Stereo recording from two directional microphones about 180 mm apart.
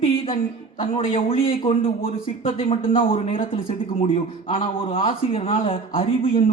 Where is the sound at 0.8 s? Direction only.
30° left (ahead or behind).